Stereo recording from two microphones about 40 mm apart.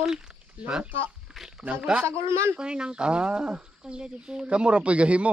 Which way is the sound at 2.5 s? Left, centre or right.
Right.